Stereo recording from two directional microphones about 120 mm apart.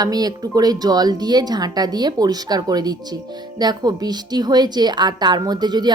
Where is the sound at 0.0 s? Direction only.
35° right (ahead or behind).